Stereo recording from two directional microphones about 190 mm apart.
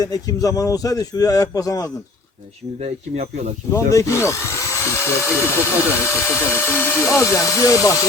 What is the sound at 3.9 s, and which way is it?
Speech, 15° left (ahead or behind).